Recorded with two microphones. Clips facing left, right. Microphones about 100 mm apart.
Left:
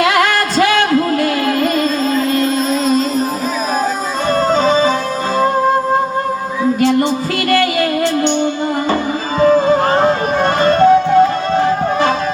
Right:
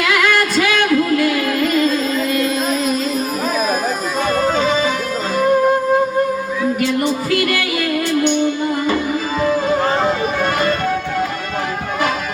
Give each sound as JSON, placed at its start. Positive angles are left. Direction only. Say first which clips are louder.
{"t": 0.0, "sound": "music", "louder": "left 3 dB", "side_deg": 35}
{"t": 4.4, "sound": "music", "louder": "left 5 dB", "side_deg": 30}
{"t": 6.7, "sound": "music", "louder": "left 4 dB", "side_deg": 30}